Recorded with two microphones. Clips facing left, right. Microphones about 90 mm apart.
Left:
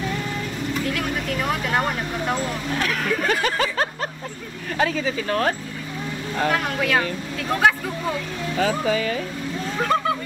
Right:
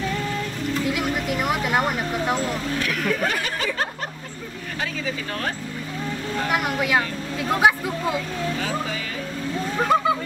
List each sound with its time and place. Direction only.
0.8 s speech: 10° right (ahead or behind)
6.5 s speech: 10° right (ahead or behind)
9.8 s vehicle: 10° right (ahead or behind)